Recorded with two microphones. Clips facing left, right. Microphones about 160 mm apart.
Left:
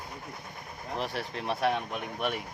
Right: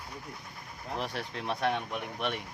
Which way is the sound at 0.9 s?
Centre (ahead or behind).